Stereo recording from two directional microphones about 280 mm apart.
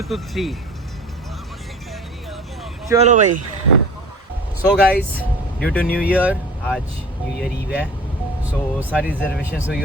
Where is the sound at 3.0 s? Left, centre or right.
Right.